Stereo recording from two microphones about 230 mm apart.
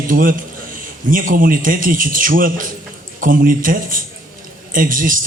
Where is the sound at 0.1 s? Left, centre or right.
Right.